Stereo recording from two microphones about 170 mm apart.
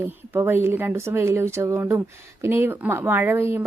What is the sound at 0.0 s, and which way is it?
Speech, 15° right (ahead or behind).